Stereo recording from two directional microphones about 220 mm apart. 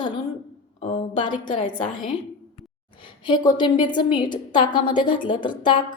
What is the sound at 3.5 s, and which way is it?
A woman's voice, 20° left (ahead or behind).